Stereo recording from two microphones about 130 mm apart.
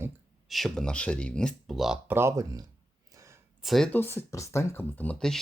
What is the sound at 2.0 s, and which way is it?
Speech, 20° right (ahead or behind).